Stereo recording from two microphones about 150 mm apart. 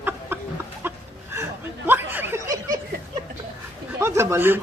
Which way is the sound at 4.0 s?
20° right (ahead or behind).